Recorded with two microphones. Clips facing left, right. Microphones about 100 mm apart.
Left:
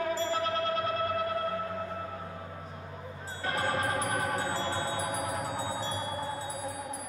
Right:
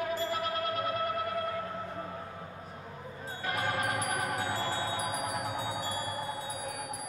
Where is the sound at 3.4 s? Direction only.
30° left (ahead or behind).